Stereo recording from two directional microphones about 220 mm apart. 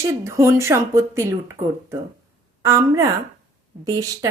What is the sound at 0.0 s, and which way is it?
A woman's voice, 10° right (ahead or behind).